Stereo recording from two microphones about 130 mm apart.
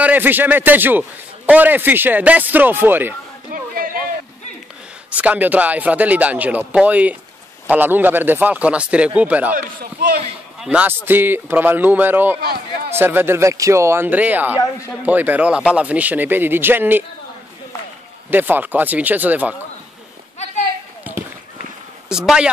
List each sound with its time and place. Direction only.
0.0 s a man's voice: 15° right (ahead or behind)
3.7 s a sound: 90° right
5.1 s a man's voice: 10° right (ahead or behind)
10.6 s a man's voice: 10° right (ahead or behind)
18.3 s a man's voice: 15° right (ahead or behind)
22.1 s speech: 5° right (ahead or behind)